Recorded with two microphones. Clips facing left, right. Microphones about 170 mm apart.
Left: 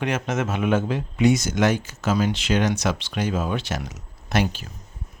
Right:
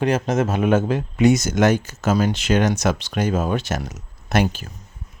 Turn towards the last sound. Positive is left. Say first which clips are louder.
# right 3 dB
turn(degrees=-50)  # may be behind; listen again after turning